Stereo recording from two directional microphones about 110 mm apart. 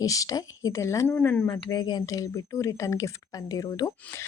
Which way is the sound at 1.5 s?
40° left (ahead or behind).